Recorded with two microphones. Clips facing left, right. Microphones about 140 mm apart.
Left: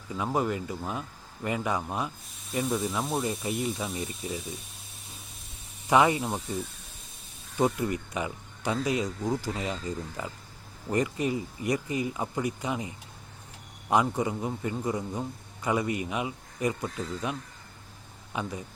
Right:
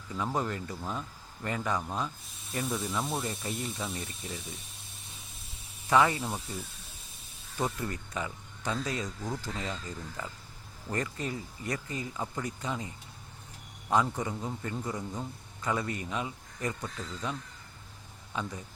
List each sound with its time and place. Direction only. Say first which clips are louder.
0.3 s a man's voice: left 7 dB; 10° left (ahead or behind)
2.5 s speech: left 4 dB; centre (ahead or behind)
5.9 s a man's voice: left 3 dB; 15° left (ahead or behind)
7.6 s a man's voice: left 7 dB; 15° left (ahead or behind)
18.3 s a man's voice: left 2 dB; 15° left (ahead or behind)